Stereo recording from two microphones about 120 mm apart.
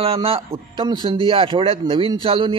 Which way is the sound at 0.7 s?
40° right (ahead or behind).